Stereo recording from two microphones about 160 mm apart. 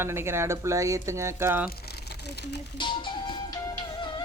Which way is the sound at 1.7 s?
80° left.